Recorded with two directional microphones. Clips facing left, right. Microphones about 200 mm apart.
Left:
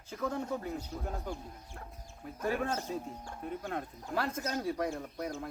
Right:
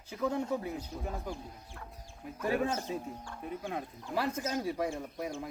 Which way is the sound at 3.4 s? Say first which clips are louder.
Even; centre (ahead or behind).